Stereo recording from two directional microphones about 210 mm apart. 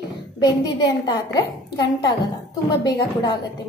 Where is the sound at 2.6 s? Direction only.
20° left (ahead or behind).